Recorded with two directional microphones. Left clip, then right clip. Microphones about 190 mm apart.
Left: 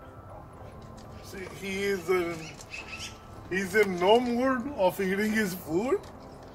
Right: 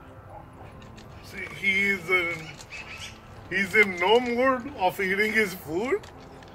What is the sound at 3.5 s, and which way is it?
Speech, 30° left (ahead or behind).